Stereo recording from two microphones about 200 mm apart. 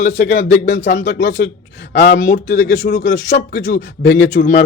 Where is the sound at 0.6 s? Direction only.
65° left (ahead or behind).